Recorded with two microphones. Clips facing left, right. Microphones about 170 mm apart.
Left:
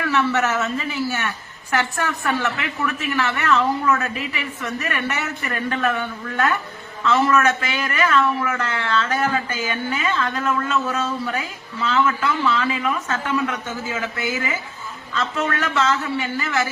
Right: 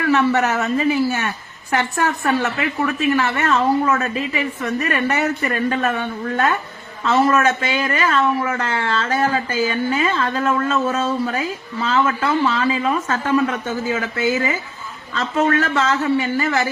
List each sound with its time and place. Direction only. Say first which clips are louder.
0.1 s a man's voice: right 4 dB; 45° right (ahead or behind)
15.2 s speech: right 6 dB; 40° right (ahead or behind)